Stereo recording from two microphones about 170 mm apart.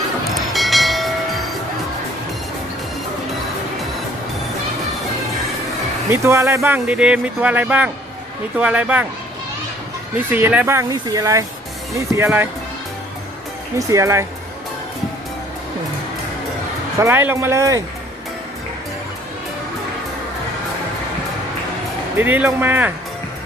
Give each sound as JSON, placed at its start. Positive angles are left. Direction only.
{"t": 0.3, "sound": "train", "side_deg": 0}
{"t": 6.1, "sound": "speech", "side_deg": -15}
{"t": 10.3, "sound": "speech", "side_deg": -10}
{"t": 13.7, "sound": "speech", "side_deg": -20}
{"t": 17.0, "sound": "speech", "side_deg": -15}
{"t": 22.2, "sound": "speech", "side_deg": -10}